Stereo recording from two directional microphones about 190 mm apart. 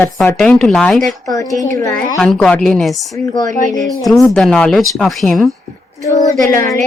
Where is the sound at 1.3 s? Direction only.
15° left (ahead or behind); by 5.5 s centre (ahead or behind).